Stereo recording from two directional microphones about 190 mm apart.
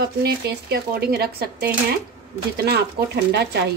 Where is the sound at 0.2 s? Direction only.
55° right (ahead or behind).